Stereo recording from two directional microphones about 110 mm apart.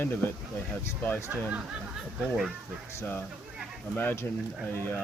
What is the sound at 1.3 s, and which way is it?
Speech, 15° right (ahead or behind).